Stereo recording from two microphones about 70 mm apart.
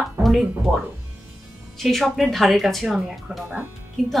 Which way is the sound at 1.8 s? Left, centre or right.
Centre.